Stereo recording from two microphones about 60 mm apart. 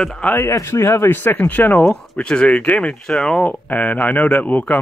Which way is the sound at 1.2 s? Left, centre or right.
Left.